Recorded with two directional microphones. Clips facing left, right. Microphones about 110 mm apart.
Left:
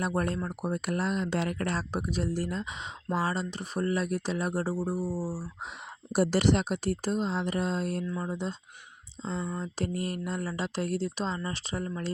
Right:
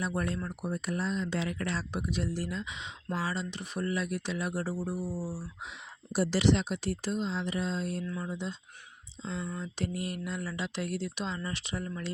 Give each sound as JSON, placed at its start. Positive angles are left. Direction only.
{"t": 0.0, "sound": "speech", "side_deg": 45}
{"t": 0.7, "sound": "speech", "side_deg": 65}
{"t": 6.1, "sound": "speech", "side_deg": 50}